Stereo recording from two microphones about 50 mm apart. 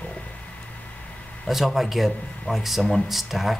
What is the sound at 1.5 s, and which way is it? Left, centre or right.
Speech, centre.